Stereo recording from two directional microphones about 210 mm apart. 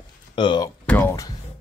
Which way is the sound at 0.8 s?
10° left (ahead or behind).